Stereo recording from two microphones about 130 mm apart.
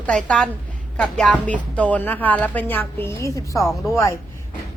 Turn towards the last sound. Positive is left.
turn(degrees=20)  # may be behind; listen again after turning